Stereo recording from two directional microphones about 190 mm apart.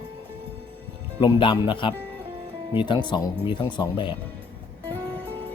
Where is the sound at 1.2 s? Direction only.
25° left (ahead or behind).